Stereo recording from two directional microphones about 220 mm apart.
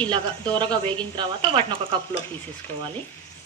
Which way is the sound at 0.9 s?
25° right (ahead or behind).